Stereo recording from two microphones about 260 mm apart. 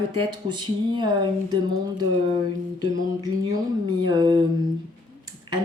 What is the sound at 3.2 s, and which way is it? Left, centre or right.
Speech, centre.